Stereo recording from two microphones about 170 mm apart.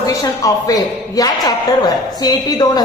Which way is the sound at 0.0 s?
20° left (ahead or behind).